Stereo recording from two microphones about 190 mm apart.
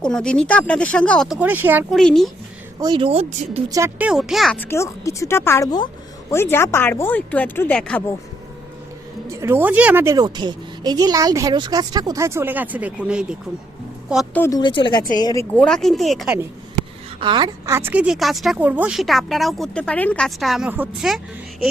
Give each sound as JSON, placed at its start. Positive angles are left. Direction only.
{"t": 0.0, "sound": "a woman's voice", "side_deg": 5}
{"t": 1.4, "sound": "speech", "side_deg": -10}
{"t": 2.0, "sound": "a woman's voice", "side_deg": 0}
{"t": 2.8, "sound": "speech", "side_deg": -25}
{"t": 3.7, "sound": "speech", "side_deg": -15}
{"t": 9.3, "sound": "speech", "side_deg": -15}
{"t": 14.3, "sound": "speech", "side_deg": 10}
{"t": 14.6, "sound": "speech", "side_deg": 25}
{"t": 15.5, "sound": "a woman's voice", "side_deg": 5}
{"t": 17.2, "sound": "a woman's voice", "side_deg": -25}